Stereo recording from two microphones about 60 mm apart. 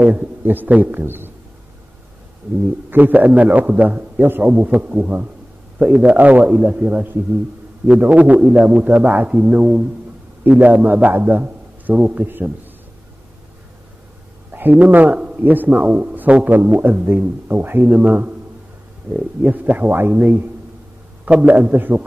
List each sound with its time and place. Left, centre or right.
0.0 s a man's voice: right
2.9 s a man's voice: right
6.8 s a man's voice: right
11.9 s a man's voice: right
12.3 s a man's voice: right
14.5 s a man's voice: right